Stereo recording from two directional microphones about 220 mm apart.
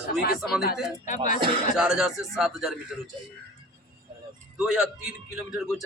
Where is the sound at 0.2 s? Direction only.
45° left (ahead or behind).